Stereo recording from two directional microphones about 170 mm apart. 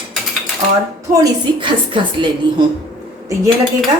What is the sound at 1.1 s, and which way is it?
Speech, 30° right (ahead or behind).